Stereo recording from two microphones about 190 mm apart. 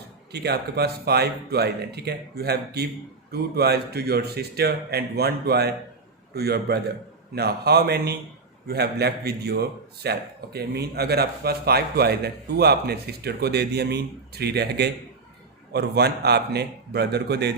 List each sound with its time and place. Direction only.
0.3 s a man's voice: 60° right (ahead or behind)